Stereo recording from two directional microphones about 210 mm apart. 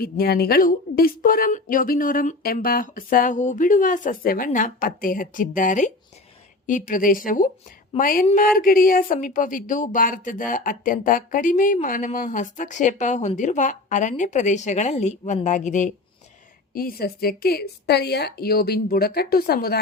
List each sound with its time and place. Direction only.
0.0 s a woman's voice: 45° left (ahead or behind)